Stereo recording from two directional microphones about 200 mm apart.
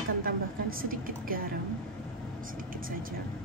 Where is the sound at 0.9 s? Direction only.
45° right (ahead or behind).